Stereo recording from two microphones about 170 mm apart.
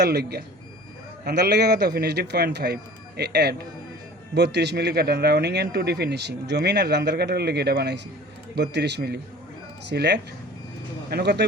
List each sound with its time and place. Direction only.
0.0 s speech: 70° right (ahead or behind)